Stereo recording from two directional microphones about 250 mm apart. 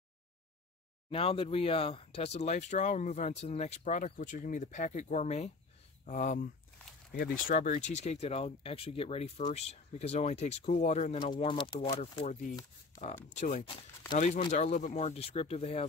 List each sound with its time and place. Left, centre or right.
1.1 s speech: left